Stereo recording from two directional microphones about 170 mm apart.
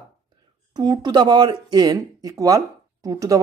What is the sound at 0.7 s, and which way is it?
Speech, 25° right (ahead or behind).